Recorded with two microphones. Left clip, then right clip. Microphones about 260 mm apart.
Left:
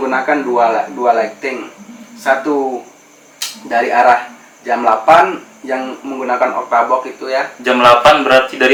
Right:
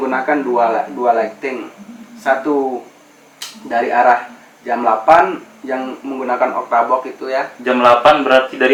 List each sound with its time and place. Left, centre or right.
0.0 s speech: centre
2.4 s speech: right
3.7 s speech: centre